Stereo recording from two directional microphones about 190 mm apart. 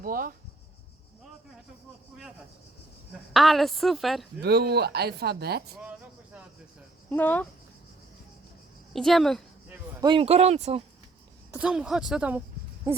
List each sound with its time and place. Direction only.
0.0 s speech: 50° right (ahead or behind)
3.1 s a woman's voice: centre (ahead or behind)
4.4 s speech: 55° right (ahead or behind)
7.1 s speech: 10° left (ahead or behind)
8.9 s a sound: centre (ahead or behind)
10.0 s speech: 25° right (ahead or behind)
11.5 s a woman's voice: 5° right (ahead or behind)